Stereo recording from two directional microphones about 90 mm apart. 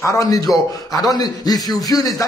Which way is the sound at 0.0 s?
35° left (ahead or behind).